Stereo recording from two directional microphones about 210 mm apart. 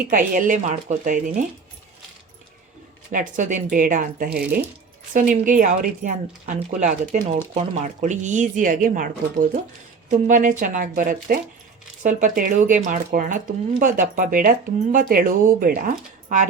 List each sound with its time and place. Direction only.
0.1 s speech: 40° right (ahead or behind)
3.1 s speech: 40° right (ahead or behind)